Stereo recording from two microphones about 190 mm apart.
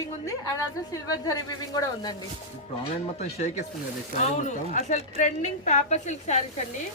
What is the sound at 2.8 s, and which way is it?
Speech, 35° left (ahead or behind).